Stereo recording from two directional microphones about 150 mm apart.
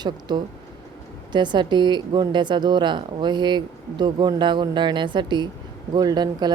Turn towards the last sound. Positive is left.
turn(degrees=-25)  # may be behind; listen again after turning